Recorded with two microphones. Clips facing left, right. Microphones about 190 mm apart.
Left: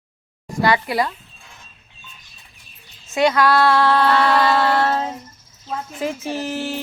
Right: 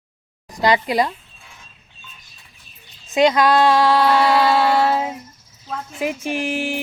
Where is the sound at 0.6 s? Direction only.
20° right (ahead or behind).